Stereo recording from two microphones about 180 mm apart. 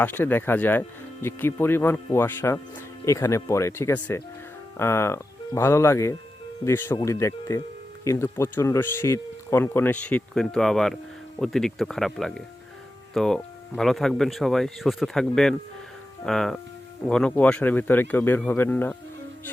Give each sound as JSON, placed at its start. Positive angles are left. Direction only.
{"t": 0.0, "sound": "speech", "side_deg": 10}